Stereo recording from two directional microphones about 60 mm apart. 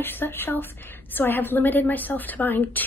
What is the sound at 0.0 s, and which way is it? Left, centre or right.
A woman's voice, left.